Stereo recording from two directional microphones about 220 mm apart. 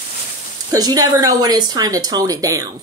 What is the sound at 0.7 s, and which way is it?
Speech, 15° right (ahead or behind).